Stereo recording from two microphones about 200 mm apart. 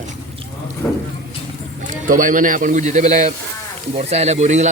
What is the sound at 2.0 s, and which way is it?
Speech, 40° right (ahead or behind).